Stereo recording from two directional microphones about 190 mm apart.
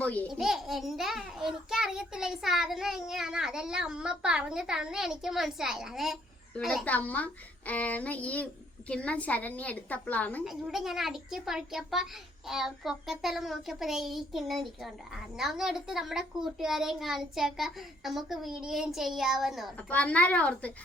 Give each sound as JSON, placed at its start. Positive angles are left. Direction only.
{"t": 0.0, "sound": "a child's voice", "side_deg": 5}